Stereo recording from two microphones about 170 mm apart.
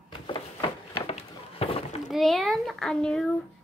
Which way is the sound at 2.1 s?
Centre (ahead or behind).